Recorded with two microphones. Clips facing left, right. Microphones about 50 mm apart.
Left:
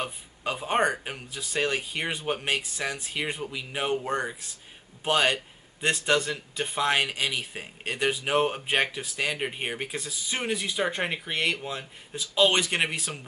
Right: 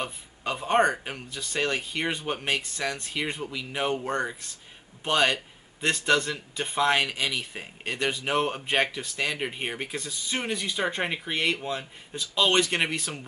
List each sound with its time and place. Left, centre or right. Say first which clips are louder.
0.0 s speech: left 1 dB; centre